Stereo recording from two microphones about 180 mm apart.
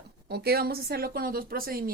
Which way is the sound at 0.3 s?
60° right (ahead or behind).